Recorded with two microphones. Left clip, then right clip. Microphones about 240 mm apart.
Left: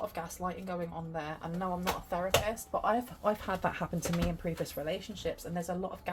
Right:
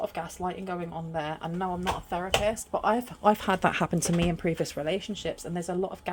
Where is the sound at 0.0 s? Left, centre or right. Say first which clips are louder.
Right 5 dB; right.